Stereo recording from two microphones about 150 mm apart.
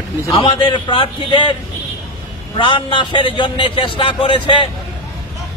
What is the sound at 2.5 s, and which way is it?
A man's voice, 35° left (ahead or behind).